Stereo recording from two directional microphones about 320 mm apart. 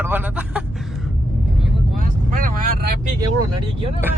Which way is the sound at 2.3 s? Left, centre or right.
Right.